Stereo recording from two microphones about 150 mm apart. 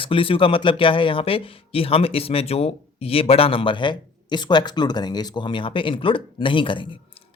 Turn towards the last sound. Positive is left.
turn(degrees=35)  # may be behind; listen again after turning